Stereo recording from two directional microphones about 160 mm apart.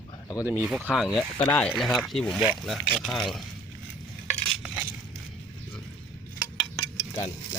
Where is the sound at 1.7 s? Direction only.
Centre (ahead or behind).